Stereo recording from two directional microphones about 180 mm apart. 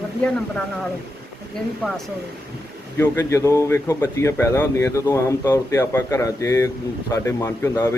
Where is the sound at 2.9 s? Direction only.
15° left (ahead or behind).